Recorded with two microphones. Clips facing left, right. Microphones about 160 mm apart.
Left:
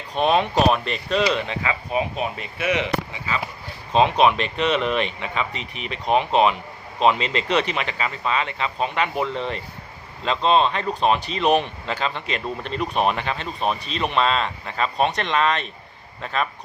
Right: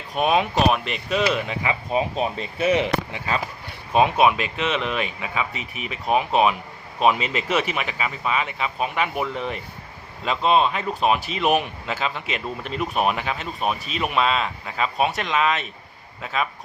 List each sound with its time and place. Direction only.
0.1 s speech: 10° right (ahead or behind)
1.6 s speech: 30° right (ahead or behind)
3.9 s speech: 10° right (ahead or behind)